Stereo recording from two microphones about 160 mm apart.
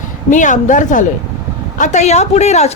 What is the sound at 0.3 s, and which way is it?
A woman's voice, 50° left (ahead or behind).